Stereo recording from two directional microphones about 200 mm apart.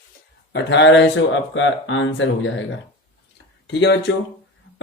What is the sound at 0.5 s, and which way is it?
Speech, 65° left (ahead or behind).